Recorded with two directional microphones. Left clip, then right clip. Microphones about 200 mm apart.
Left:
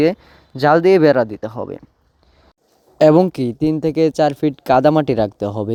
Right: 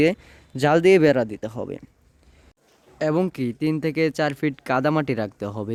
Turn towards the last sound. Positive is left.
turn(degrees=20)  # may be behind; listen again after turning